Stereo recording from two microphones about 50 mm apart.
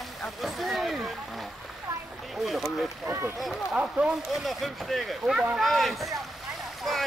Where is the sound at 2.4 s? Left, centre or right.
Centre.